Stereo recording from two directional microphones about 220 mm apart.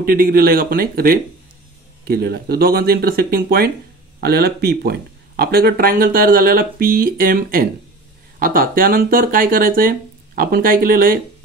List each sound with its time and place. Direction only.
0.0 s speech: 40° right (ahead or behind)